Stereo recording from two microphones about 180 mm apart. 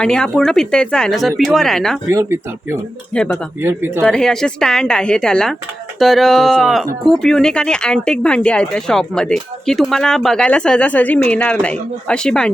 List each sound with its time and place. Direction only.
0.0 s speech: 5° left (ahead or behind)
2.0 s speech: 15° right (ahead or behind)
3.1 s speech: 5° left (ahead or behind)
3.6 s speech: 10° right (ahead or behind)
4.0 s speech: 5° left (ahead or behind)